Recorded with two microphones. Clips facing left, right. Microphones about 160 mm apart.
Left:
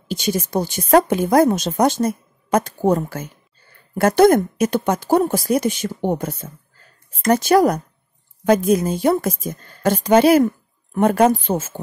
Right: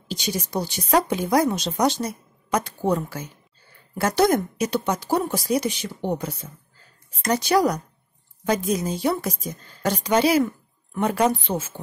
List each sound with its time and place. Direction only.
0.1 s a woman's voice: 50° left (ahead or behind)